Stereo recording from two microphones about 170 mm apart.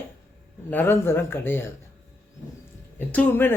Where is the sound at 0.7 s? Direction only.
10° left (ahead or behind).